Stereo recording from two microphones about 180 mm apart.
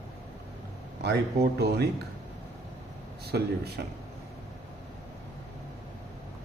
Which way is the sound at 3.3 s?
65° right (ahead or behind).